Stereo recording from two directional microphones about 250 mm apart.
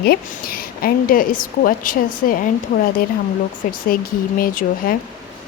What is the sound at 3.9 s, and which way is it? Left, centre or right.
A woman's voice, left.